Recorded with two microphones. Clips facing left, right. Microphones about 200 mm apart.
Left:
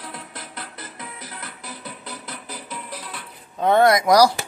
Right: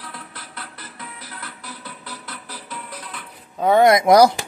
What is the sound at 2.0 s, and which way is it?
Music, 15° left (ahead or behind).